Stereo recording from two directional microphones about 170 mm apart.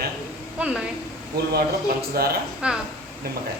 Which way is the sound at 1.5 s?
65° right (ahead or behind).